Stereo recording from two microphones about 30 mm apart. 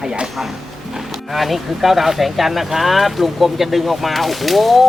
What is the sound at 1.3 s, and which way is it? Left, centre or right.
Speech, centre.